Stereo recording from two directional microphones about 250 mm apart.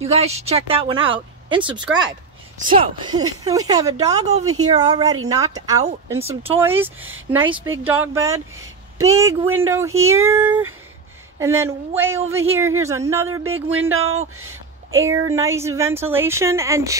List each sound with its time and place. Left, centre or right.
0.0 s a woman's voice: right
8.5 s a sound: right
9.1 s a woman's voice: centre
13.7 s speech: right
15.0 s a woman's voice: centre